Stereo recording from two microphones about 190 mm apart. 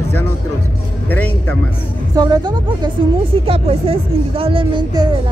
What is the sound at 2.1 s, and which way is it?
A woman's voice, 20° right (ahead or behind).